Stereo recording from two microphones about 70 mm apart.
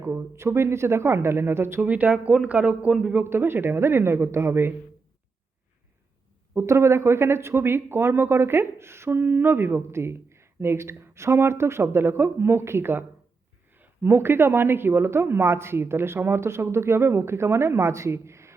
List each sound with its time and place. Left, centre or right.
0.0 s speech: right
1.8 s speech: right
3.2 s speech: right
6.6 s speech: right